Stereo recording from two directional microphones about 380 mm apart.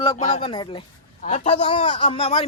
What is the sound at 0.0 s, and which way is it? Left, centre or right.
A man's voice, centre.